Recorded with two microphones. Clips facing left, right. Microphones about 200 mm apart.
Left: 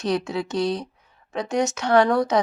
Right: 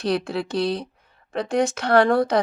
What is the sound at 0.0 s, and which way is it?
Speech, 60° right (ahead or behind).